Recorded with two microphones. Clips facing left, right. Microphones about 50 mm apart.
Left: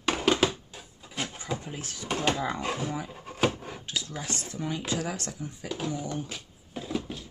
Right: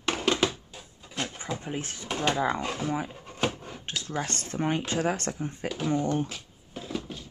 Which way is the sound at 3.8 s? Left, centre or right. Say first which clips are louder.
Right 5 dB; right.